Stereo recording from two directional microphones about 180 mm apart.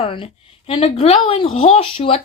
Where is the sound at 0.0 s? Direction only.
30° left (ahead or behind).